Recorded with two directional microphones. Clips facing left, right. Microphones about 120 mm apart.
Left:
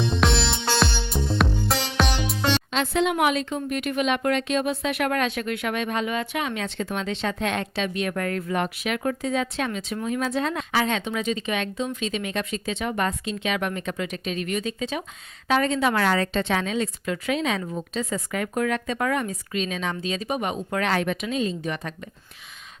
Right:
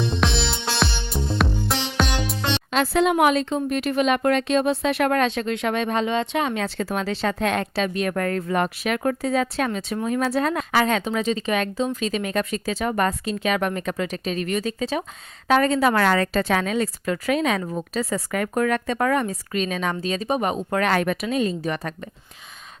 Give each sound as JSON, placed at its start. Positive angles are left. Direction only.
{"t": 0.2, "sound": "music", "side_deg": 0}
{"t": 2.8, "sound": "a woman's voice", "side_deg": -40}
{"t": 10.2, "sound": "a woman's voice", "side_deg": -60}
{"t": 16.0, "sound": "a woman's voice", "side_deg": -65}